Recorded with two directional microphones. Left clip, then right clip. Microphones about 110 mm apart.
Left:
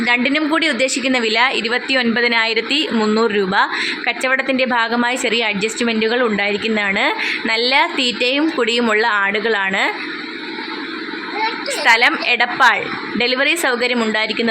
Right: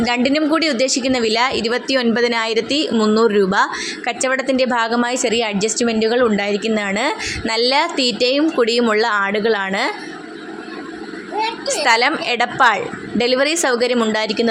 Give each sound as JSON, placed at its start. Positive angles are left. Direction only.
{"t": 0.0, "sound": "a woman's voice", "side_deg": -30}
{"t": 11.7, "sound": "a woman's voice", "side_deg": -30}